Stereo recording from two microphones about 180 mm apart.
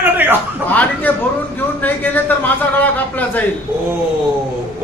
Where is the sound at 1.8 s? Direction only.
10° left (ahead or behind).